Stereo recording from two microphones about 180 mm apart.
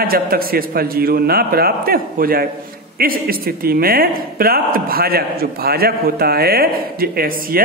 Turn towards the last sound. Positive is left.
turn(degrees=-55)  # may be behind; listen again after turning